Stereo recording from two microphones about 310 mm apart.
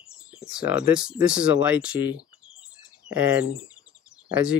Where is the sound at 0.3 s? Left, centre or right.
Centre.